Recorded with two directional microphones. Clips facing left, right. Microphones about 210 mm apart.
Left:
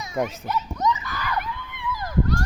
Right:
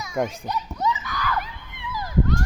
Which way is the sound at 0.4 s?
10° right (ahead or behind).